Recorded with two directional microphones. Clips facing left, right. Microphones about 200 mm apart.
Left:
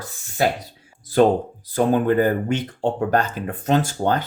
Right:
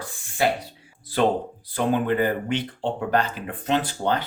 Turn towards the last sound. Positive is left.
turn(degrees=45)  # may be behind; listen again after turning